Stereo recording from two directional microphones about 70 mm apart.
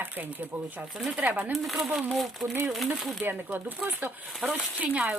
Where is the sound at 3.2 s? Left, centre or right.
Right.